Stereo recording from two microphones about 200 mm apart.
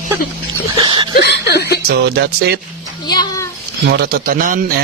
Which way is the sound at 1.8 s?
55° right (ahead or behind).